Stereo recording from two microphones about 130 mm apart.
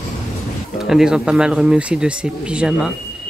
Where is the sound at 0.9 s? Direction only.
5° right (ahead or behind).